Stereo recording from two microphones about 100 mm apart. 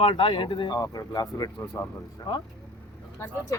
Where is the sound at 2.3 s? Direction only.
55° left (ahead or behind).